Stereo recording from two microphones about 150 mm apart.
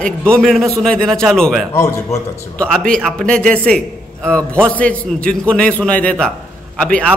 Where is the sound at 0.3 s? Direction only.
5° left (ahead or behind).